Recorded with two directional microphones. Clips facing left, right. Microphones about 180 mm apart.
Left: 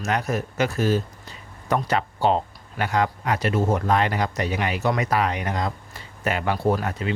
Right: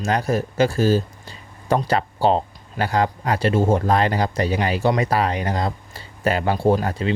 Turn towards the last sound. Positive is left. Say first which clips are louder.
# right 4 dB
turn(degrees=-30)  # may be behind; listen again after turning